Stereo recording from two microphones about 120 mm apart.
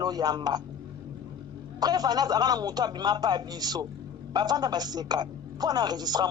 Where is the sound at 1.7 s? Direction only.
35° right (ahead or behind).